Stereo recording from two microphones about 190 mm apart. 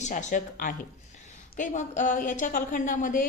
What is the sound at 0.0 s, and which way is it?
A woman's voice, 40° left (ahead or behind).